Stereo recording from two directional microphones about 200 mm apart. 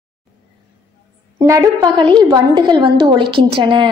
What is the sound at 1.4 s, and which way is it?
A woman's voice, 15° right (ahead or behind).